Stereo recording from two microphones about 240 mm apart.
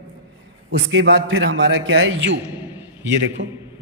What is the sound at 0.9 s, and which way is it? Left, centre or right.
A man's voice, right.